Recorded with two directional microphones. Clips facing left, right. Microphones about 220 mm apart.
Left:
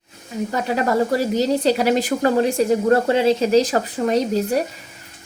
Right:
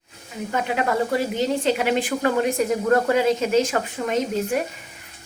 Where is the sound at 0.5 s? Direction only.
35° left (ahead or behind).